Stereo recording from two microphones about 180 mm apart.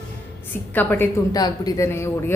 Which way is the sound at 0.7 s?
10° left (ahead or behind).